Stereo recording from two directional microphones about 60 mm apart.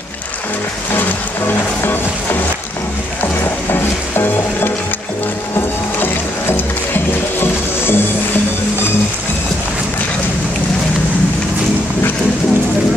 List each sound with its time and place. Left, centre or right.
3.7 s music: left
5.9 s music: left